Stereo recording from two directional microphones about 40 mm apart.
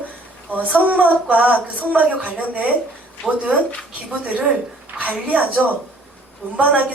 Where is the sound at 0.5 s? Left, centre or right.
Right.